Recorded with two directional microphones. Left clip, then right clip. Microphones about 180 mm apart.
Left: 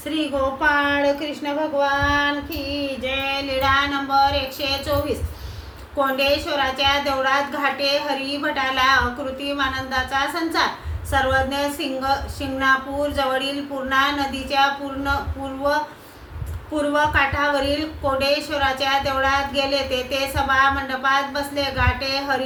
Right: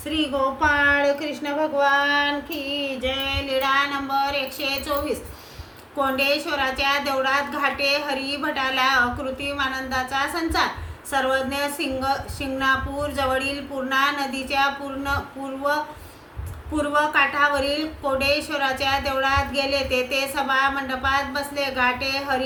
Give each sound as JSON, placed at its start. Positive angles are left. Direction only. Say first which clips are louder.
{"t": 0.6, "sound": "a woman's voice", "louder": "even", "side_deg": -15}
{"t": 16.7, "sound": "a woman's voice", "louder": "left 1 dB", "side_deg": -15}